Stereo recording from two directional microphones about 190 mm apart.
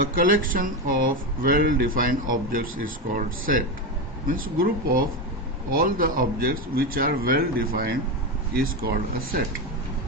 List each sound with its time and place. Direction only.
0.0 s speech: 45° right (ahead or behind)